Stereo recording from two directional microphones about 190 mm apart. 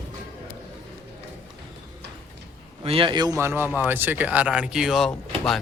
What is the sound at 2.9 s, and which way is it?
A man's voice, 25° right (ahead or behind).